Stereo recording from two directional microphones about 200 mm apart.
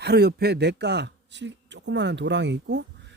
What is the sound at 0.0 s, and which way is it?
Speech, 55° right (ahead or behind).